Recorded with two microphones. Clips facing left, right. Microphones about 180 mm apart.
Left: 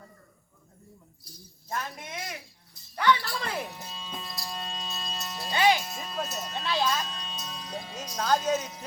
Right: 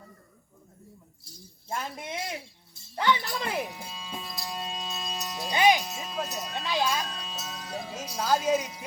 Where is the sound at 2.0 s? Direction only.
30° right (ahead or behind).